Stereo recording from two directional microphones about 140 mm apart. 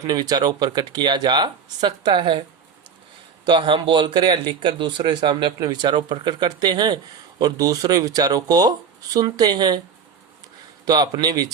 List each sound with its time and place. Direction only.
0.1 s speech: 30° right (ahead or behind)
3.4 s a man's voice: 35° right (ahead or behind)
10.8 s a man's voice: 30° right (ahead or behind)